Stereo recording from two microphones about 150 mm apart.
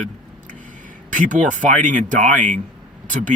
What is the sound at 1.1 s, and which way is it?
Speech, 60° right (ahead or behind).